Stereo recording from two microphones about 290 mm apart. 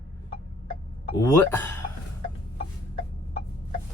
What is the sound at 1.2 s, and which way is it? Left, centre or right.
Speech, centre.